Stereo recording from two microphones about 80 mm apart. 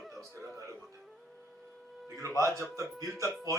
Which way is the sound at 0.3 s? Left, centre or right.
Right.